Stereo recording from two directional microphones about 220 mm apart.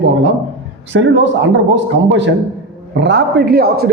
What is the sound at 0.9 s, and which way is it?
A man's voice, 55° right (ahead or behind).